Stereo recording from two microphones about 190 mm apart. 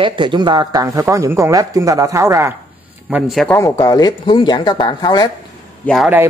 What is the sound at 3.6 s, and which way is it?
Speech, 20° left (ahead or behind).